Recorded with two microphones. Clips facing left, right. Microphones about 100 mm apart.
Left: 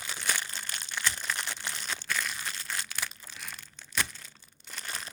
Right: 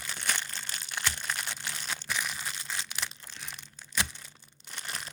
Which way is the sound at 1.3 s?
Centre (ahead or behind).